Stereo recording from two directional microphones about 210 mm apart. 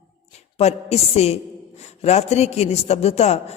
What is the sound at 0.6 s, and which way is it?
A man's voice, 30° left (ahead or behind).